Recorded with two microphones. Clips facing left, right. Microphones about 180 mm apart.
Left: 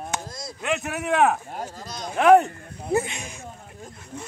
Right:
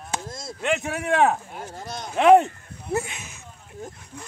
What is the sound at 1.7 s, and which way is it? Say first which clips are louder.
Speech: right 1 dB; 25° right (ahead or behind).